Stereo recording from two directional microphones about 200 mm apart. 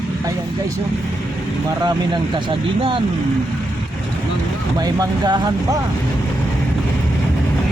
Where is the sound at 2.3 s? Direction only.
25° right (ahead or behind).